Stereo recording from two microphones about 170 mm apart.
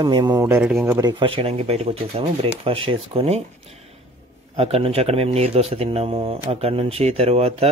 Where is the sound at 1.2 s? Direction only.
35° right (ahead or behind).